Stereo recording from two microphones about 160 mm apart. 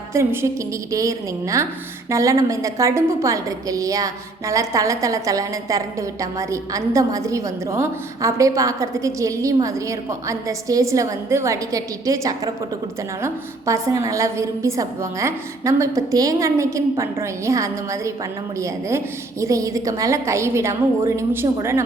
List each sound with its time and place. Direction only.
0.1 s a woman's voice: 15° right (ahead or behind)